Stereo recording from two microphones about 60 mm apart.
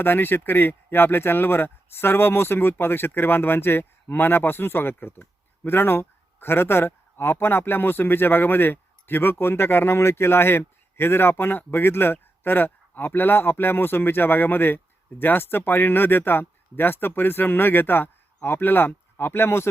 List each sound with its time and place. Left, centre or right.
0.0 s speech: left